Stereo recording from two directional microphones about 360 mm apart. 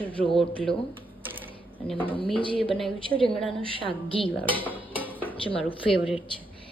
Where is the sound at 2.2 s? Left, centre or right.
Centre.